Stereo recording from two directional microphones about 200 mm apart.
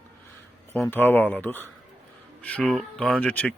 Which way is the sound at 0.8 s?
10° left (ahead or behind).